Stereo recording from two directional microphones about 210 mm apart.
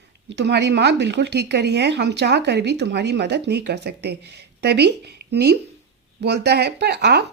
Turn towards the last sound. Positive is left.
turn(degrees=-50)  # may be behind; listen again after turning